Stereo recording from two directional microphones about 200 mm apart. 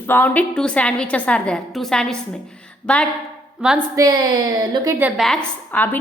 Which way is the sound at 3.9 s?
20° right (ahead or behind).